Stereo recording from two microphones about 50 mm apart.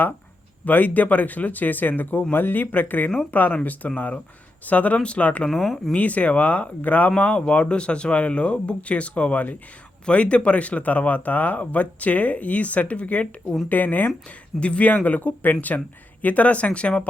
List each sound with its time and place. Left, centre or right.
0.6 s speech: left
5.5 s speech: centre
5.9 s speech: left